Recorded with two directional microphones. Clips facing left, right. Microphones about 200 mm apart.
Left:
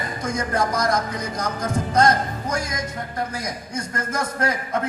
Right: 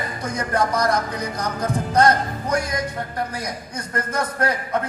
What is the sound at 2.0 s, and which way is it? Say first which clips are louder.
Speech: right 1 dB; 30° right (ahead or behind).